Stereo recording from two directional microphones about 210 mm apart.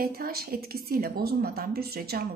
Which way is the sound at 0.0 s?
45° right (ahead or behind).